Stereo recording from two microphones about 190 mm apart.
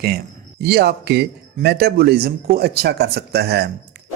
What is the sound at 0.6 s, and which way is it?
Speech, 60° right (ahead or behind).